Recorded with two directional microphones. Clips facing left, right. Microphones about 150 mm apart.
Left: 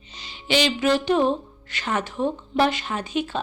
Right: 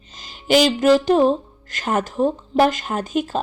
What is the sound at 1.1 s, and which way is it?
Speech, 35° right (ahead or behind).